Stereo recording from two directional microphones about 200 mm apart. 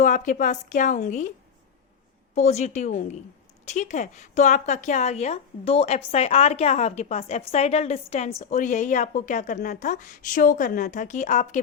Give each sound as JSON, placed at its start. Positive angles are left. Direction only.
{"t": 0.0, "sound": "a woman's voice", "side_deg": 40}
{"t": 2.3, "sound": "a woman's voice", "side_deg": 35}